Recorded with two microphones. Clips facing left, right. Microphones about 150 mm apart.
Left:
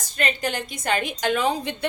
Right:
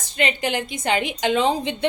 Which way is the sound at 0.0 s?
20° right (ahead or behind).